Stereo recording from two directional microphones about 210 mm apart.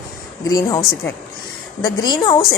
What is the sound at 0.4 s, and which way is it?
A woman's voice, 15° left (ahead or behind).